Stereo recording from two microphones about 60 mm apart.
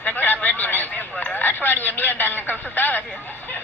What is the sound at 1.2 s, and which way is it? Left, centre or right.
A man's voice, left.